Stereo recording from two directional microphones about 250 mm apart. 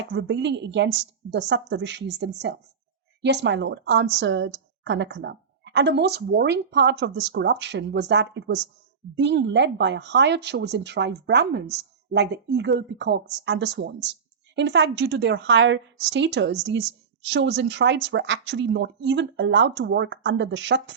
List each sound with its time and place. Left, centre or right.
0.0 s a woman's voice: right